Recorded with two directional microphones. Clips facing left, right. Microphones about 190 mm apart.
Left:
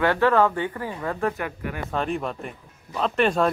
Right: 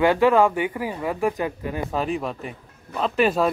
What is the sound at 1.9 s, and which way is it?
Speech, 5° right (ahead or behind).